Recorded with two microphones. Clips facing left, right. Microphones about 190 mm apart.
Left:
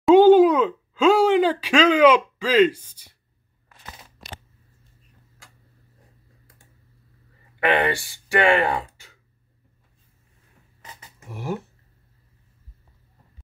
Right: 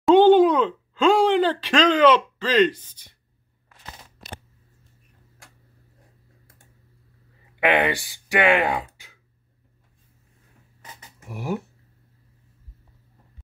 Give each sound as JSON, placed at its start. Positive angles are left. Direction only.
{"t": 0.0, "sound": "a sound", "side_deg": 5}
{"t": 7.6, "sound": "speech", "side_deg": -15}
{"t": 11.2, "sound": "speech", "side_deg": -15}